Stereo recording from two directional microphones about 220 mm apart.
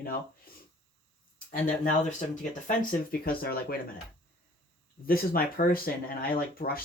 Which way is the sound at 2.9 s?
45° left (ahead or behind).